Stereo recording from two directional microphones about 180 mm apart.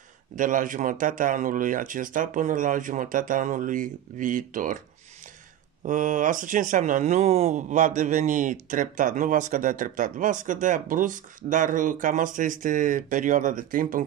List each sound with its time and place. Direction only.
0.4 s speech: 45° right (ahead or behind)
5.9 s speech: 45° right (ahead or behind)